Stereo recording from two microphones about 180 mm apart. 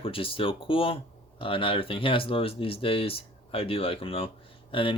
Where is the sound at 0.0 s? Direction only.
30° left (ahead or behind).